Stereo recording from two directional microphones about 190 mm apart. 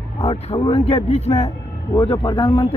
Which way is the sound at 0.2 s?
30° left (ahead or behind).